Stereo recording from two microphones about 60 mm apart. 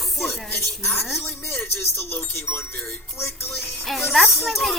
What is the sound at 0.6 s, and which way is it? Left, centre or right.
Speech, left.